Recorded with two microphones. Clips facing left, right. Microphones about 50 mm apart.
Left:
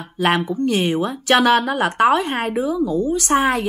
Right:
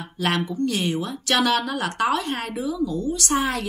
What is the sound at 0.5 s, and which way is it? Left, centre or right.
A woman's voice, left.